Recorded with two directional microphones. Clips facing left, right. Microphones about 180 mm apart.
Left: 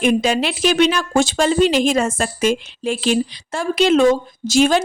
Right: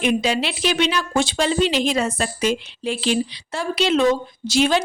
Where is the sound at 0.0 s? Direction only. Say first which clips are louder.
Left 3 dB; 45° left (ahead or behind).